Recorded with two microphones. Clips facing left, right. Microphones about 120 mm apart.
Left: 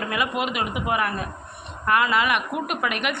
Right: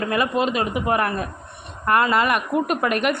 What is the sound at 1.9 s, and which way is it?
A woman's voice, 40° right (ahead or behind).